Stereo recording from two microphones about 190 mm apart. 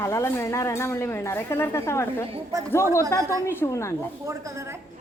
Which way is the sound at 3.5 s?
15° left (ahead or behind).